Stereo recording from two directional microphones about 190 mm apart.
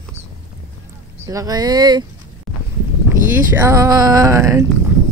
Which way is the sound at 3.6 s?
15° right (ahead or behind).